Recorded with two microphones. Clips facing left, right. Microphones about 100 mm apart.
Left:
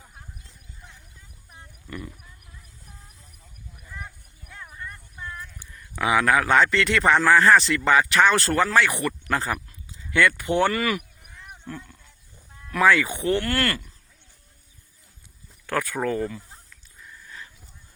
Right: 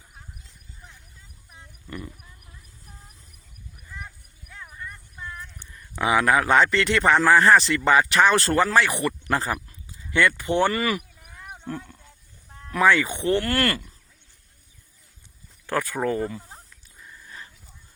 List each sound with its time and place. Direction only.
4.7 s a sound: centre (ahead or behind)
6.0 s speech: centre (ahead or behind)
11.2 s wild animals: 45° right (ahead or behind)
12.7 s speech: centre (ahead or behind)
13.4 s speech: 35° right (ahead or behind)
15.6 s speech: 5° right (ahead or behind)
16.0 s speech: 30° right (ahead or behind)